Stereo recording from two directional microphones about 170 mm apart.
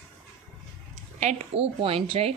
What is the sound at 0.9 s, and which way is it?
A woman's voice, 40° right (ahead or behind).